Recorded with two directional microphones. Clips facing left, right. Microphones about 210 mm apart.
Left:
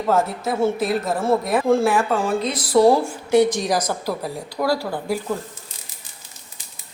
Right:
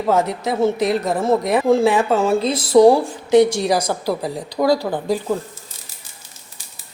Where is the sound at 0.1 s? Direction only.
20° right (ahead or behind).